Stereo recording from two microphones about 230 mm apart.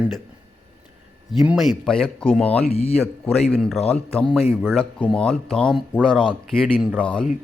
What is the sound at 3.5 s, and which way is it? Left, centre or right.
Speech, centre.